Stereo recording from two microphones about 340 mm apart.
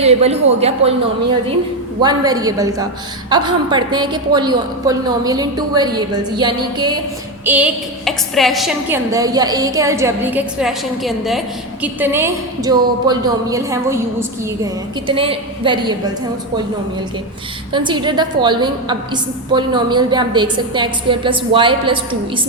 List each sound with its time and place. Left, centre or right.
0.0 s a woman's voice: centre
2.0 s a woman's voice: centre
17.7 s a woman's voice: centre